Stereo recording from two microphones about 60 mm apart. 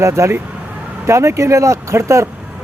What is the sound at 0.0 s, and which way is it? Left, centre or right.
Speech, right.